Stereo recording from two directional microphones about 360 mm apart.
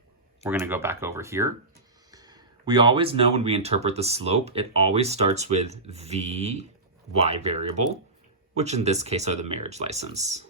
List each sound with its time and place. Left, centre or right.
0.4 s speech: centre